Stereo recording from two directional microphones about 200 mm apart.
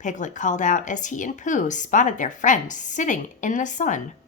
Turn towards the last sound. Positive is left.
turn(degrees=40)  # may be behind; listen again after turning